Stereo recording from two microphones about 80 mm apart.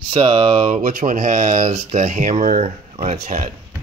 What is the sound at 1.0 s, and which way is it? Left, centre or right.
Speech, right.